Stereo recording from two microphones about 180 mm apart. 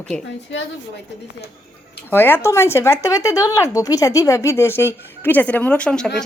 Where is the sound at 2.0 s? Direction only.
10° left (ahead or behind).